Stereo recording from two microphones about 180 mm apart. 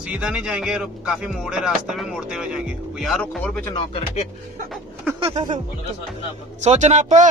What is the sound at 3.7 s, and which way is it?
Speech, 30° left (ahead or behind).